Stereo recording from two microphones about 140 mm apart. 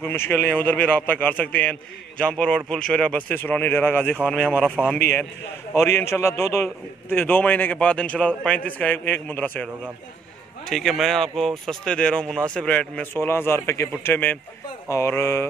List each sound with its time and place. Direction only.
0.0 s a man's voice: 15° left (ahead or behind)
4.8 s a man's voice: 10° right (ahead or behind)
5.8 s a man's voice: 15° left (ahead or behind)
10.7 s a man's voice: centre (ahead or behind); by 15.4 s 20° left (ahead or behind)